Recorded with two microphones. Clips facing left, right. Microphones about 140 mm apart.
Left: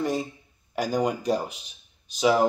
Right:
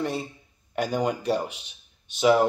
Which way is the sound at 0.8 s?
Centre (ahead or behind).